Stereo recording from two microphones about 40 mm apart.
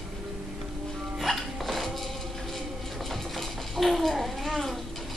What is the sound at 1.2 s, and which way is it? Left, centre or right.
Music, centre.